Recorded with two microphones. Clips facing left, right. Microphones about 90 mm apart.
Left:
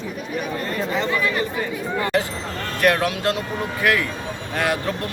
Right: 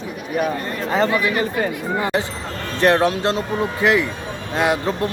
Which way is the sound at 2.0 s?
20° right (ahead or behind).